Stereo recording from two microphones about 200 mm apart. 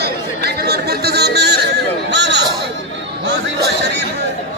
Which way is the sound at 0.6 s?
55° right (ahead or behind).